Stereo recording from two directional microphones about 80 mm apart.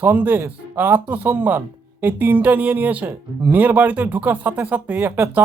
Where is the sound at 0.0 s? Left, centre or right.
Right.